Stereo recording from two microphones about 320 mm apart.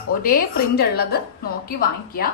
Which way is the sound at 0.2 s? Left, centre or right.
Left.